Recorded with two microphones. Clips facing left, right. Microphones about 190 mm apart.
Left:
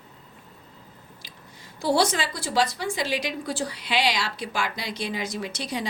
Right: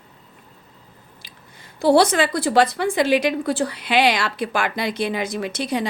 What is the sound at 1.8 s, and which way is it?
A woman's voice, 60° right (ahead or behind).